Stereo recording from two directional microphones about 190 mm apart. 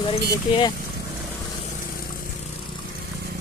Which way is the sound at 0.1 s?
30° left (ahead or behind).